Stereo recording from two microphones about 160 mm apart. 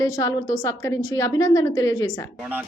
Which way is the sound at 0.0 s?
20° left (ahead or behind).